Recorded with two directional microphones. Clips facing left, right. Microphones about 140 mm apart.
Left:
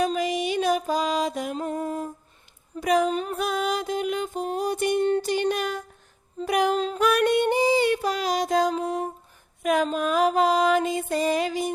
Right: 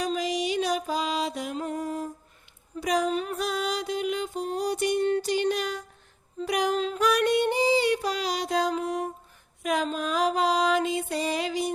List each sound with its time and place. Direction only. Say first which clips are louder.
0.0 s music: left 3 dB; 55° left (ahead or behind)
1.6 s music: left 2 dB; 30° left (ahead or behind)
2.8 s speech: left 4 dB; 55° left (ahead or behind)
3.1 s a sound: left 1 dB; 40° left (ahead or behind)
3.3 s music: left 3 dB; 55° left (ahead or behind)
6.7 s music: left 2 dB; 35° left (ahead or behind)
7.0 s music: left 2 dB; 55° left (ahead or behind)
8.7 s music: left 2 dB; 25° left (ahead or behind)
9.6 s music: left 4 dB; 50° left (ahead or behind)